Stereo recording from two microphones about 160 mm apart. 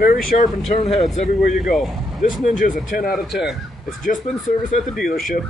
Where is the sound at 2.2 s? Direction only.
55° left (ahead or behind).